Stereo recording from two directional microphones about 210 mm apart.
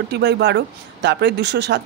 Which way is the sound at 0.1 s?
55° right (ahead or behind).